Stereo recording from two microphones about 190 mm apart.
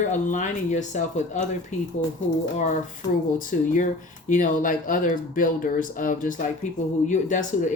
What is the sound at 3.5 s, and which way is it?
Speech, 50° left (ahead or behind).